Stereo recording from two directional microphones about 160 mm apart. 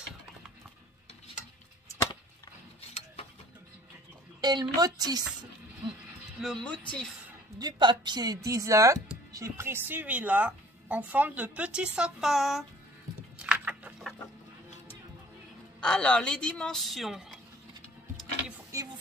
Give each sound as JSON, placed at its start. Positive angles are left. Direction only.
{"t": 4.4, "sound": "a woman's voice", "side_deg": -25}
{"t": 6.4, "sound": "speech", "side_deg": 5}
{"t": 7.5, "sound": "a woman's voice", "side_deg": -25}
{"t": 13.4, "sound": "a sound", "side_deg": -5}
{"t": 15.8, "sound": "a woman's voice", "side_deg": 5}
{"t": 18.7, "sound": "a sound", "side_deg": -20}